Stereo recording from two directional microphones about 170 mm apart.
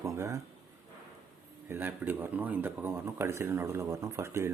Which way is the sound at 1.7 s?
10° right (ahead or behind).